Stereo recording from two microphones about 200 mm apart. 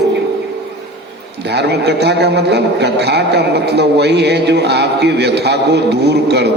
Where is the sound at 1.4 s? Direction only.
55° right (ahead or behind).